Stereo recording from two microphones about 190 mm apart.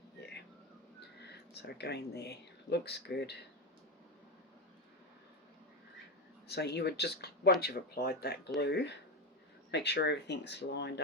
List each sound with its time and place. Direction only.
0.9 s speech: 60° left (ahead or behind)
6.5 s speech: 60° left (ahead or behind)